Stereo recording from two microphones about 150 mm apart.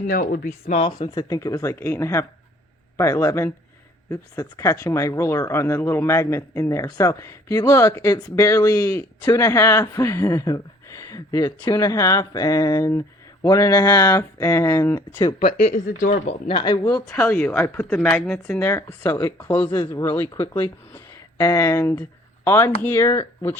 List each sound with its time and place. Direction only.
0.1 s speech: 70° left (ahead or behind)
0.6 s speech: 50° left (ahead or behind)
1.3 s speech: 20° left (ahead or behind)
15.2 s speech: 35° left (ahead or behind)
15.6 s speech: 60° left (ahead or behind)
16.5 s speech: 30° left (ahead or behind)
17.2 s speech: 15° left (ahead or behind)